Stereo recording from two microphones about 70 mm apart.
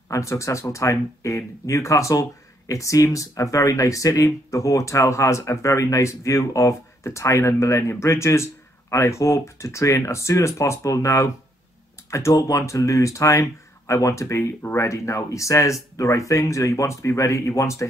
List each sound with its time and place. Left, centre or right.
0.1 s speech: left